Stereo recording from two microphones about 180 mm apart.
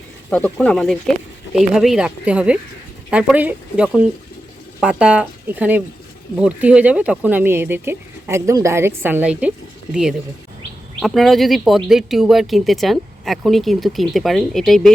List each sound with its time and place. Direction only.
0.3 s speech: 5° left (ahead or behind)